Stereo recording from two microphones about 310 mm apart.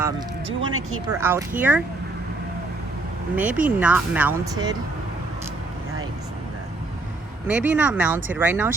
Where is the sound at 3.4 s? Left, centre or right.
Centre.